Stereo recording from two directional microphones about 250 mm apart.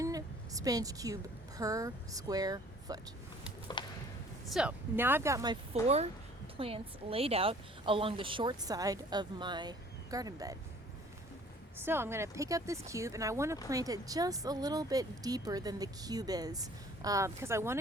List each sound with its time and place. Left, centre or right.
0.0 s a woman's voice: centre
3.8 s a sound: centre
4.4 s speech: centre
5.8 s a woman's voice: right
11.8 s speech: centre